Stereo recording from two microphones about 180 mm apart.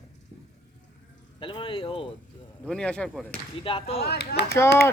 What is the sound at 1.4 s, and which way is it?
Speech, 30° left (ahead or behind).